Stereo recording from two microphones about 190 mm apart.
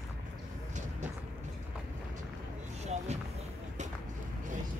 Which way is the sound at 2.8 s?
35° right (ahead or behind).